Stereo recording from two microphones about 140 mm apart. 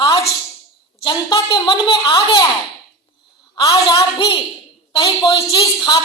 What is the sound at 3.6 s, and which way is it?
A woman's voice, 30° left (ahead or behind).